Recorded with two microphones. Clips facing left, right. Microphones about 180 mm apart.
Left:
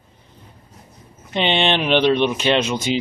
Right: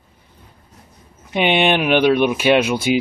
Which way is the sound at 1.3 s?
10° right (ahead or behind).